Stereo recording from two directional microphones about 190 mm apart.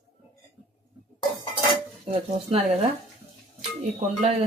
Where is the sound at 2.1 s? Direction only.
35° right (ahead or behind).